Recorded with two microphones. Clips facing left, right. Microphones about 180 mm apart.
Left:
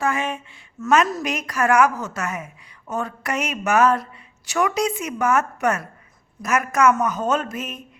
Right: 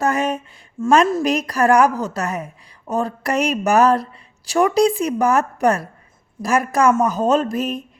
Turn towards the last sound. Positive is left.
turn(degrees=-35)  # may be behind; listen again after turning